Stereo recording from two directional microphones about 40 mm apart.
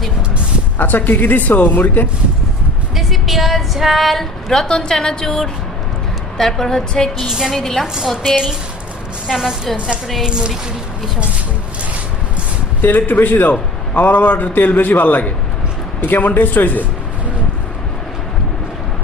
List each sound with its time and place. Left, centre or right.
0.8 s a man's voice: left
2.9 s female singing: centre
4.6 s a woman's voice: centre
7.3 s a woman's voice: centre
7.5 s a woman's voice: centre
8.0 s a woman's voice: centre
9.7 s a woman's voice: right
12.8 s a man's voice: left